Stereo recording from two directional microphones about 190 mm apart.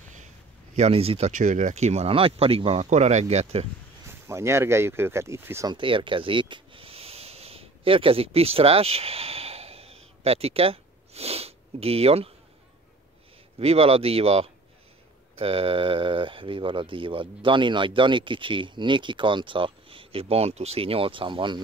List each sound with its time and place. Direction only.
0.7 s speech: 30° right (ahead or behind)
4.1 s speech: 15° right (ahead or behind)
5.8 s a sound: 25° right (ahead or behind)
10.2 s sniff: 30° right (ahead or behind)
13.6 s speech: 30° right (ahead or behind)